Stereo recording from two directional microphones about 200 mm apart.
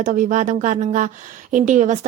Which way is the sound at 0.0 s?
40° right (ahead or behind).